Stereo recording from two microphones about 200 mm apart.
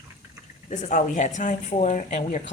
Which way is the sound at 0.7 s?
40° left (ahead or behind).